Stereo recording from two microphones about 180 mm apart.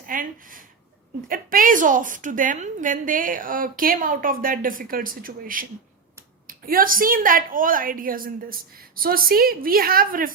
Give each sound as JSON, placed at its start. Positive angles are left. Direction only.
{"t": 0.0, "sound": "a woman's voice", "side_deg": -50}